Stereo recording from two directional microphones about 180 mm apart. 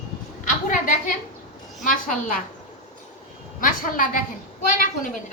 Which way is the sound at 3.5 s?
50° left (ahead or behind).